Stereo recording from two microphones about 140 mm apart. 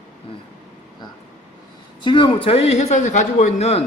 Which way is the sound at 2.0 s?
35° left (ahead or behind).